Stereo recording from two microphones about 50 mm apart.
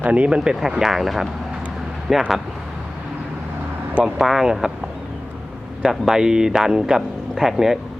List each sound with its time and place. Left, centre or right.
0.0 s speech: right
0.7 s speech: centre
4.2 s speech: centre
5.8 s speech: centre